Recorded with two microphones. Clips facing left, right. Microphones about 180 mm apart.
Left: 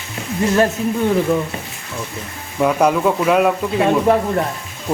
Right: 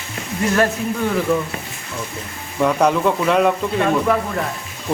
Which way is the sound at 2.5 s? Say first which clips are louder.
Left 1 dB; 5° left (ahead or behind).